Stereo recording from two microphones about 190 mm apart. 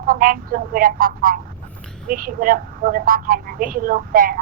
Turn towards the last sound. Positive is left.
turn(degrees=-50)  # may be behind; listen again after turning